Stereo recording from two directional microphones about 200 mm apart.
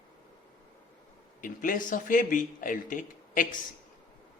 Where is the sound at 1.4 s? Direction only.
40° left (ahead or behind).